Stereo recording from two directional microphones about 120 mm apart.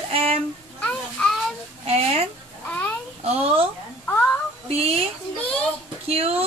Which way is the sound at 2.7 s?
15° left (ahead or behind).